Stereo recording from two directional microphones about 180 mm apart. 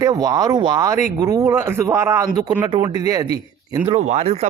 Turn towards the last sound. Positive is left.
turn(degrees=-35)  # may be behind; listen again after turning